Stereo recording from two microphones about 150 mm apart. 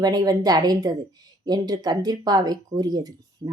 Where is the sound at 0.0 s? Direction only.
25° right (ahead or behind).